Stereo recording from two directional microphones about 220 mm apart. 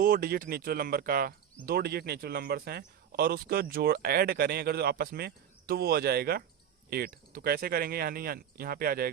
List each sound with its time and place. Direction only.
0.0 s speech: 40° right (ahead or behind)